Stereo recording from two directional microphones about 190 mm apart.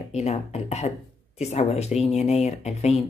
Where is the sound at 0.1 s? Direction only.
35° left (ahead or behind).